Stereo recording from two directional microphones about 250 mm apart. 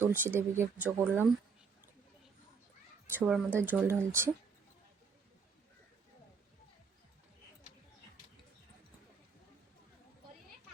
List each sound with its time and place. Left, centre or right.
0.0 s speech: centre
3.2 s speech: centre
3.7 s speech: centre